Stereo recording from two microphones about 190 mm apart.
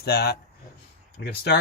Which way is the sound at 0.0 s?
55° left (ahead or behind).